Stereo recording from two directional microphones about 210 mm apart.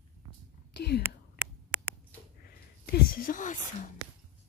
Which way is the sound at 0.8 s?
50° left (ahead or behind).